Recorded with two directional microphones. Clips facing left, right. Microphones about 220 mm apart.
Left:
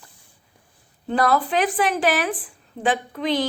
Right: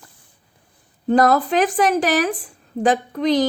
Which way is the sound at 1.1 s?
45° right (ahead or behind).